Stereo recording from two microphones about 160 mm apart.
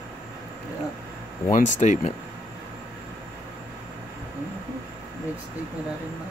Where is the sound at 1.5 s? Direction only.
50° left (ahead or behind).